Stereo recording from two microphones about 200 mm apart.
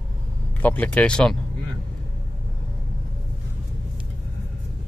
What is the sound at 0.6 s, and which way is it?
Speech, 5° left (ahead or behind).